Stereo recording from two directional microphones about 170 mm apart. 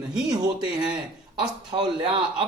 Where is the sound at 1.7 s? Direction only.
30° right (ahead or behind).